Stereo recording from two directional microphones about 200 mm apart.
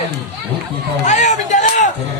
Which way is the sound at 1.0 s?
35° left (ahead or behind).